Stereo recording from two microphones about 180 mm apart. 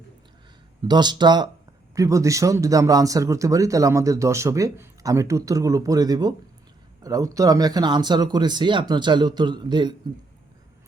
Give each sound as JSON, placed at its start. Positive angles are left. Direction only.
{"t": 0.9, "sound": "speech", "side_deg": -25}